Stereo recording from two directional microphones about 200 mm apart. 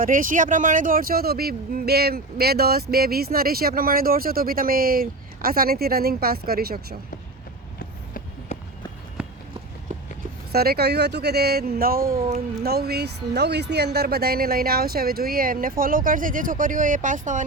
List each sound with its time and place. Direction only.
0.0 s speech: 40° right (ahead or behind)
7.8 s run: 40° left (ahead or behind)
9.9 s a sound: 40° right (ahead or behind)
10.5 s speech: 50° right (ahead or behind)